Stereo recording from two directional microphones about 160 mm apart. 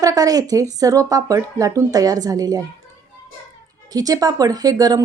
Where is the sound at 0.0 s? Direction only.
20° right (ahead or behind).